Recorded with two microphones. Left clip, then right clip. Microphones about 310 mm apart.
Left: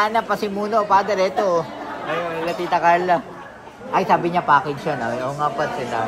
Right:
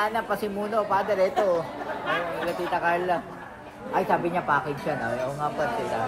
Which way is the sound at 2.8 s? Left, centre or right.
Left.